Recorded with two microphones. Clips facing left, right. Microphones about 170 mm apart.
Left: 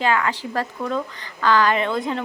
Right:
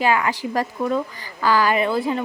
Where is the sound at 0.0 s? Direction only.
10° right (ahead or behind).